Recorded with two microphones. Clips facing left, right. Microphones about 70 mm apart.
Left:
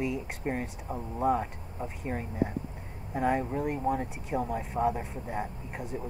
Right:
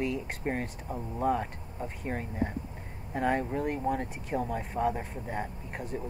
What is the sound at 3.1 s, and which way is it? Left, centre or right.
Speech, centre.